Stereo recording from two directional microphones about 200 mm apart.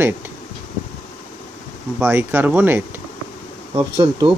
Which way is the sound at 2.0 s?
10° right (ahead or behind).